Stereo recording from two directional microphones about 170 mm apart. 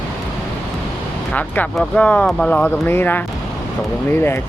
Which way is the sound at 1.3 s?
10° left (ahead or behind).